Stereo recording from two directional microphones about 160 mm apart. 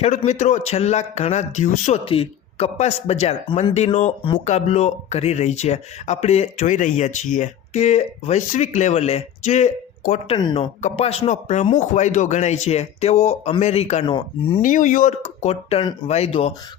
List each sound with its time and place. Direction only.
0.3 s speech: 50° left (ahead or behind)
2.0 s speech: 35° left (ahead or behind)
10.2 s speech: 30° left (ahead or behind)
14.6 s speech: 55° left (ahead or behind)